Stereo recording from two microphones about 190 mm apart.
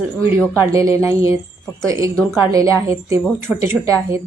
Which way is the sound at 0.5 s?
15° right (ahead or behind).